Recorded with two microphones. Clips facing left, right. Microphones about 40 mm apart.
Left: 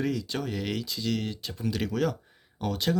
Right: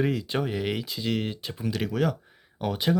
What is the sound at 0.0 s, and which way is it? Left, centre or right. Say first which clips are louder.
Speech: right 3 dB; right.